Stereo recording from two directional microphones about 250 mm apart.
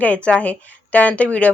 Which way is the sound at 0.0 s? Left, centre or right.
Centre.